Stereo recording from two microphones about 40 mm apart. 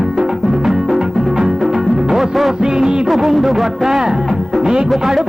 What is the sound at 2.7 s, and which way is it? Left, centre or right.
Music, right.